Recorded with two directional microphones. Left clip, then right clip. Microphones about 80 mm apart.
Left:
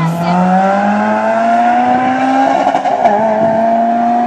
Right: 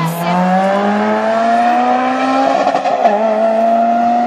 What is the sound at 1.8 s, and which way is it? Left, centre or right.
Vehicle, right.